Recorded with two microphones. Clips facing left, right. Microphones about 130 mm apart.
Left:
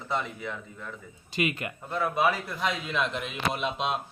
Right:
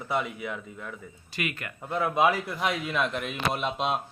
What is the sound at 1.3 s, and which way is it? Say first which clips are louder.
Speech: left 5 dB; 20° left (ahead or behind).